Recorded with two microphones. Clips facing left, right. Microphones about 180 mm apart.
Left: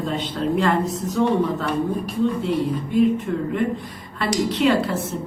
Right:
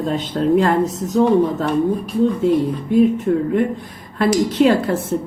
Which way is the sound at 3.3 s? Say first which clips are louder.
Right 7 dB; 40° right (ahead or behind).